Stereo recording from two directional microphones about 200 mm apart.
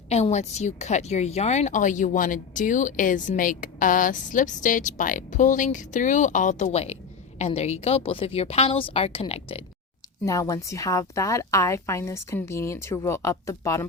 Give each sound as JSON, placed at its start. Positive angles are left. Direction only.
{"t": 0.1, "sound": "speech", "side_deg": 35}
{"t": 10.2, "sound": "a woman's voice", "side_deg": 15}